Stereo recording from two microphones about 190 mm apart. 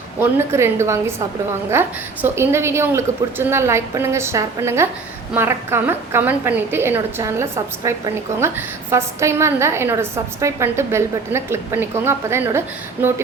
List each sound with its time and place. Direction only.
0.2 s a woman's voice: 10° right (ahead or behind)